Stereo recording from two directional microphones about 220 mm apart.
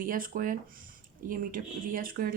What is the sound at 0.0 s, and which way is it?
Speech, 40° right (ahead or behind).